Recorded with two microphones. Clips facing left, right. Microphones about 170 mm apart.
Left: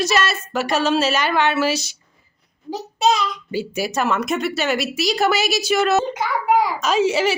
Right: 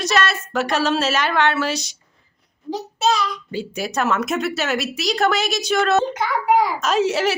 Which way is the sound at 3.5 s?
5° left (ahead or behind).